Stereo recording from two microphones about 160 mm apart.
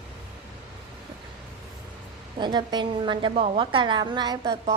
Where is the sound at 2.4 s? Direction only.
30° right (ahead or behind).